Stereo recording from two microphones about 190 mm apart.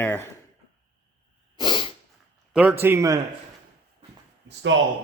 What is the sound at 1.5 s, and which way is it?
Sneeze, 25° left (ahead or behind).